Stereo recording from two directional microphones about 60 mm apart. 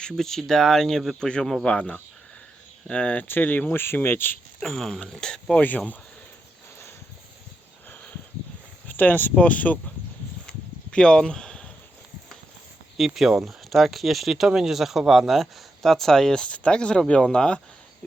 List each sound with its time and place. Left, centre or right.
0.1 s speech: centre
3.2 s speech: left
4.6 s speech: centre
8.9 s speech: left
10.9 s speech: centre
13.0 s speech: centre